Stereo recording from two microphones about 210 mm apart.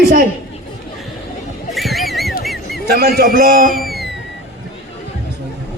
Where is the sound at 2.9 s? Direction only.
45° right (ahead or behind).